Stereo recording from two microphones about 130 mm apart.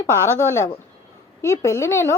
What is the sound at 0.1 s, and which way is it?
A woman's voice, 20° left (ahead or behind).